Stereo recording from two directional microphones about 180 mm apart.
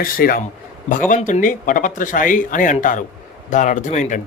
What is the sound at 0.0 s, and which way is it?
Speech, 50° left (ahead or behind).